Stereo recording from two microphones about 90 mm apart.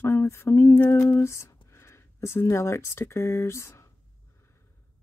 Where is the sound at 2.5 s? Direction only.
30° left (ahead or behind).